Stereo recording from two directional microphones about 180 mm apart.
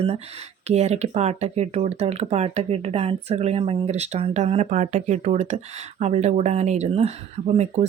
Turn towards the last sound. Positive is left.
turn(degrees=-40)  # may be behind; listen again after turning